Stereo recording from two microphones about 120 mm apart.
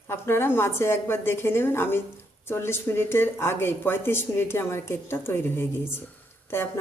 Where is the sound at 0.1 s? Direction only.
20° left (ahead or behind).